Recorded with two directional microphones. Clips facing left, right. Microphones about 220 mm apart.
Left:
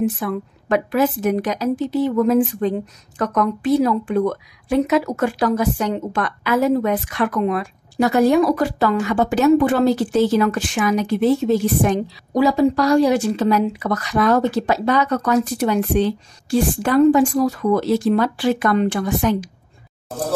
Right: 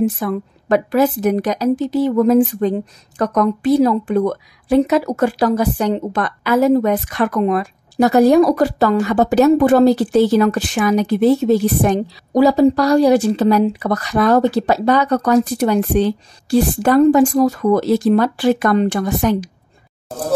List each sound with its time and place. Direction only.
0.0 s a woman's voice: 35° right (ahead or behind)